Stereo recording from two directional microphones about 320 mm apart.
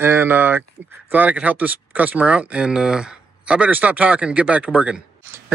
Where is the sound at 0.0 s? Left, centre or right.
Centre.